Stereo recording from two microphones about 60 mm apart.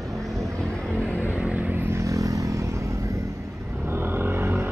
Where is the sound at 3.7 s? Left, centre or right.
Right.